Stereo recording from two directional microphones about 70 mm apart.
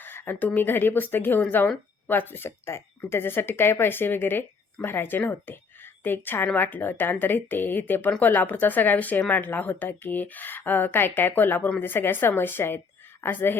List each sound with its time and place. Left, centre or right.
0.0 s a woman's voice: left